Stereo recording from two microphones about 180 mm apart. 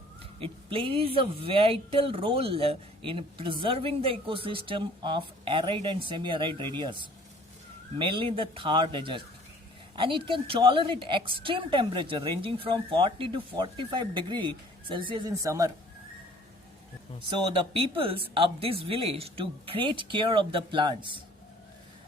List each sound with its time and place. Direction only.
0.3 s speech: 30° right (ahead or behind)
17.2 s speech: 30° right (ahead or behind)